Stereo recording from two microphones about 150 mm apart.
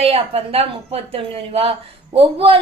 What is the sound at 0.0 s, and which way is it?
A woman's voice, 40° right (ahead or behind).